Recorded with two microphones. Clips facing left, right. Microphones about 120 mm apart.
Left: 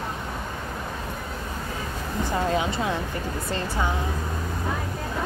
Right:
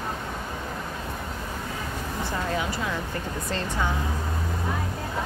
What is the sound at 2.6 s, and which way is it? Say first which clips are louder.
Speech: left 3 dB; 25° left (ahead or behind).